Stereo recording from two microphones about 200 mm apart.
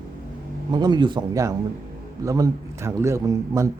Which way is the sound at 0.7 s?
20° right (ahead or behind).